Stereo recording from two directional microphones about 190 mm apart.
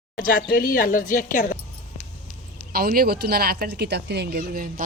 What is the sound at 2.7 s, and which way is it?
Speech, 50° right (ahead or behind).